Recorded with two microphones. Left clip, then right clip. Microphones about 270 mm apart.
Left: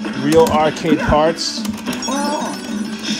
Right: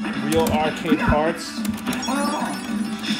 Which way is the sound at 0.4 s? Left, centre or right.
Left.